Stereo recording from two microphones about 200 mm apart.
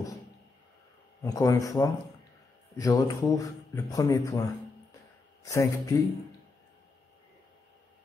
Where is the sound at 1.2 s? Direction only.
15° left (ahead or behind).